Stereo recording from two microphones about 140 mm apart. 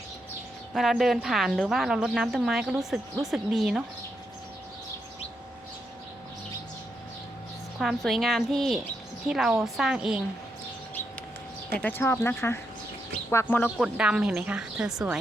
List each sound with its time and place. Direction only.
0.7 s a woman's voice: centre (ahead or behind)
7.8 s a woman's voice: centre (ahead or behind)
11.8 s speech: 15° left (ahead or behind)
13.7 s a woman's voice: 5° right (ahead or behind)